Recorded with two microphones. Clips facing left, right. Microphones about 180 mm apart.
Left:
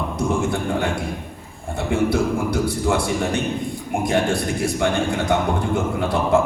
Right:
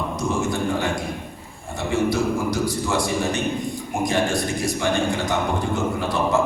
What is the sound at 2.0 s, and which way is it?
A man's voice, 55° left (ahead or behind).